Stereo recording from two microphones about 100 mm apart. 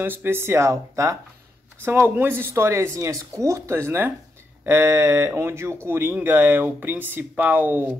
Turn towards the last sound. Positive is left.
turn(degrees=-20)  # may be behind; listen again after turning